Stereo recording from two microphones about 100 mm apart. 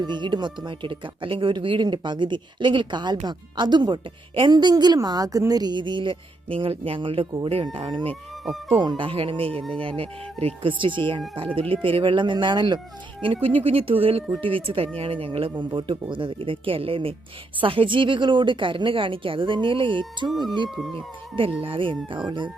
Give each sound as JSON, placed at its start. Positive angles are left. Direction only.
{"t": 0.0, "sound": "a woman's voice", "side_deg": -50}
{"t": 13.2, "sound": "a woman's voice", "side_deg": -75}
{"t": 20.2, "sound": "speech", "side_deg": 0}
{"t": 20.9, "sound": "a woman's voice", "side_deg": -60}